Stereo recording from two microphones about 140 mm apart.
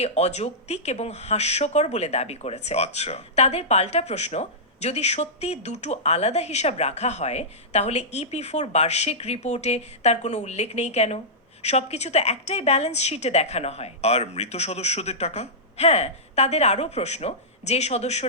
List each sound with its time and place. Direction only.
0.0 s speech: 50° left (ahead or behind)